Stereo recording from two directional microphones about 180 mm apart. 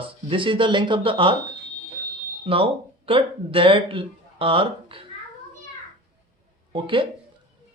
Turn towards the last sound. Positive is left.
turn(degrees=-30)  # may be behind; listen again after turning